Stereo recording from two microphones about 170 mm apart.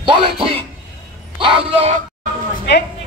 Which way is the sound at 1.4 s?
30° right (ahead or behind).